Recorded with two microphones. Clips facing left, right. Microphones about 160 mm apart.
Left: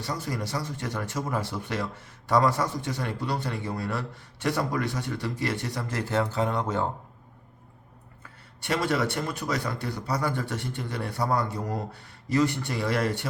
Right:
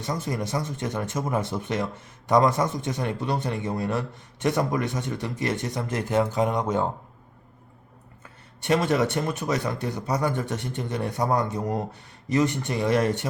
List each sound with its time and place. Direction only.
0.0 s speech: 20° right (ahead or behind)
8.6 s speech: 20° right (ahead or behind)